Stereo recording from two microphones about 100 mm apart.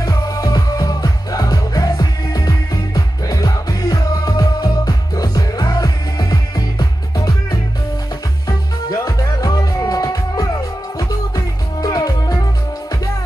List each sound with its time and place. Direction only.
0.0 s music: 40° left (ahead or behind)
8.5 s music: 35° left (ahead or behind)